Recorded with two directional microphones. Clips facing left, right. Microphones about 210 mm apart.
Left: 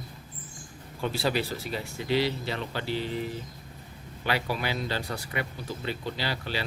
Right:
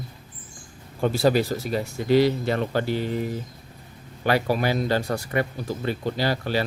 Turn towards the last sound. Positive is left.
turn(degrees=-45)  # may be behind; listen again after turning